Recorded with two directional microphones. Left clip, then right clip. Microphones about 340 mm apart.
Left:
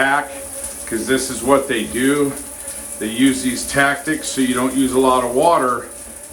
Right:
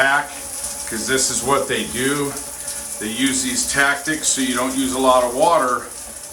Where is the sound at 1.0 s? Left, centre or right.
Centre.